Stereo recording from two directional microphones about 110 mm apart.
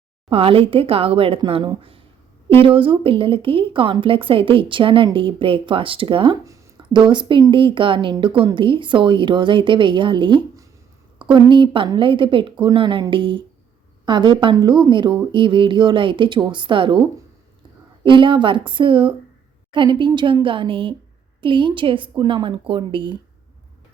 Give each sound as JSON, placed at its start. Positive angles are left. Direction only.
{"t": 0.3, "sound": "speech", "side_deg": -55}
{"t": 18.0, "sound": "speech", "side_deg": -50}
{"t": 22.4, "sound": "speech", "side_deg": -50}